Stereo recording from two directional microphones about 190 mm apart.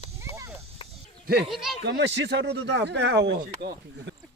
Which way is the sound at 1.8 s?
65° right (ahead or behind).